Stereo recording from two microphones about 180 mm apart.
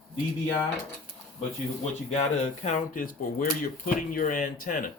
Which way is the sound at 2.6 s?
50° left (ahead or behind).